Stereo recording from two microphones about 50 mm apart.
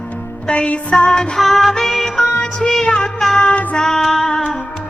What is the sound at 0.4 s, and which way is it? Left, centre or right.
Music, left.